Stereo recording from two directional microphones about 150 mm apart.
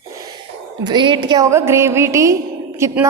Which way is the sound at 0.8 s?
30° right (ahead or behind).